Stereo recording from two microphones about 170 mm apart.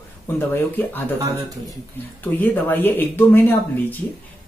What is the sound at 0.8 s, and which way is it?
Speech, 10° left (ahead or behind).